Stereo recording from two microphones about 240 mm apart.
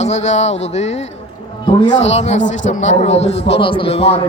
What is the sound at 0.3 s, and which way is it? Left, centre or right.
A man's voice, left.